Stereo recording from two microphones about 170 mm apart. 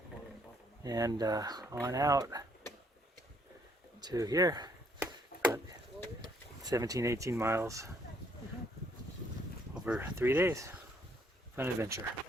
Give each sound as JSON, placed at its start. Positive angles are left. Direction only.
{"t": 0.8, "sound": "speech", "side_deg": -20}
{"t": 4.0, "sound": "speech", "side_deg": -20}
{"t": 5.3, "sound": "chop", "side_deg": 60}
{"t": 6.2, "sound": "speech", "side_deg": -20}
{"t": 9.7, "sound": "speech", "side_deg": -5}